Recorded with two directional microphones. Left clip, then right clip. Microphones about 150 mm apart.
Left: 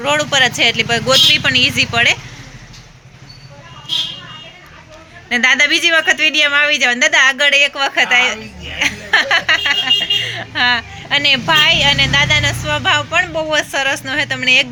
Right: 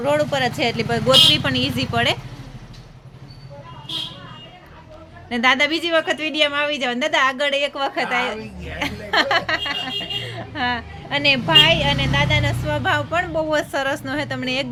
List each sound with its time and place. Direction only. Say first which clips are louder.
0.0 s speech: left 6 dB; 20° right (ahead or behind)
5.3 s speech: left 6 dB; 15° right (ahead or behind)